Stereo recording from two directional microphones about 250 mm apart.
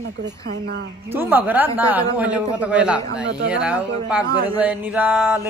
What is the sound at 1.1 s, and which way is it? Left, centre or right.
Speech, centre.